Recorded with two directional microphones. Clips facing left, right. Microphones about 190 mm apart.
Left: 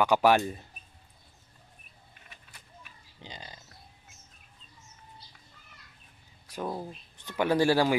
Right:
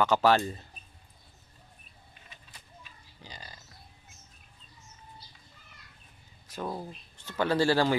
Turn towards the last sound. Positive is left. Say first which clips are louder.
# left 1 dB
turn(degrees=10)  # may be behind; listen again after turning